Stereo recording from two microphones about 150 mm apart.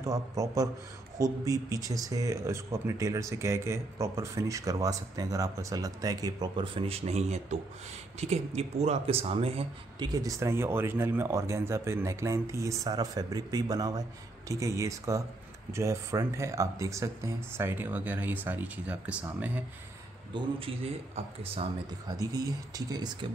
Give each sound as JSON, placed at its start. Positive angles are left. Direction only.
{"t": 0.0, "sound": "speech", "side_deg": -25}
{"t": 10.0, "sound": "speech", "side_deg": -25}
{"t": 20.3, "sound": "speech", "side_deg": -35}
{"t": 22.0, "sound": "speech", "side_deg": -25}